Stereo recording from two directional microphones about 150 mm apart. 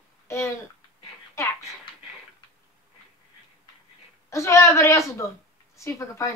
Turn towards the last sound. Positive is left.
turn(degrees=20)  # may be behind; listen again after turning